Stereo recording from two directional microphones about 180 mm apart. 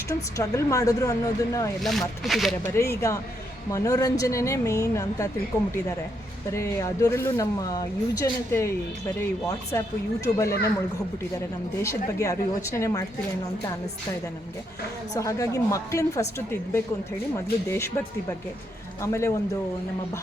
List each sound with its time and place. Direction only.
0.1 s speech: 15° left (ahead or behind)
1.8 s speech: centre (ahead or behind)
2.6 s speech: 15° left (ahead or behind)
6.5 s speech: 15° left (ahead or behind)
11.8 s speech: 15° left (ahead or behind)
15.1 s speech: 20° left (ahead or behind)
19.0 s speech: 15° left (ahead or behind)